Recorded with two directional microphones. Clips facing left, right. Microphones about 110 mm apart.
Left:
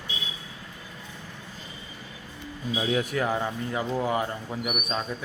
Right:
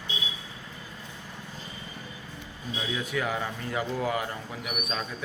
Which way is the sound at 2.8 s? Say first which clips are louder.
Left 4 dB; 45° left (ahead or behind).